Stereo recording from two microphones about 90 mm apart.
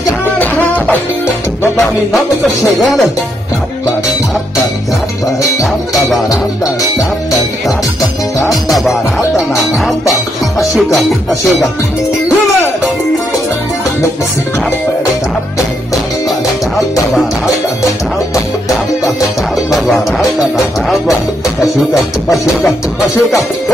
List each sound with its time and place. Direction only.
0.4 s music: 20° left (ahead or behind)
2.8 s music: centre (ahead or behind)
5.6 s music: centre (ahead or behind)
10.8 s music: centre (ahead or behind)
19.7 s music: 5° right (ahead or behind)
22.3 s music: centre (ahead or behind)